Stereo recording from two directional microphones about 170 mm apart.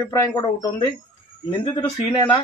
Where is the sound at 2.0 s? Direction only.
20° left (ahead or behind).